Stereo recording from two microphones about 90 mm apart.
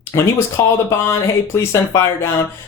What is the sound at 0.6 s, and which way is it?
Speech, 30° left (ahead or behind).